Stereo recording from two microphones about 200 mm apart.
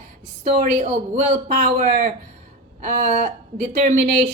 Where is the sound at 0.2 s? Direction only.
35° right (ahead or behind).